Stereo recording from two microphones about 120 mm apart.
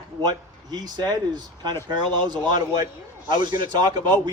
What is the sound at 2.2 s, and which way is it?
Speech, 40° right (ahead or behind).